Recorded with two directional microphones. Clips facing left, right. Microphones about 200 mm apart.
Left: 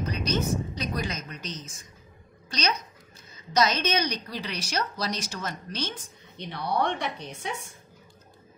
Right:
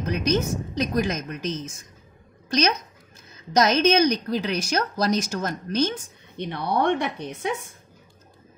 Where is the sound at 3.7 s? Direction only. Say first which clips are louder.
Right 9 dB; 50° right (ahead or behind).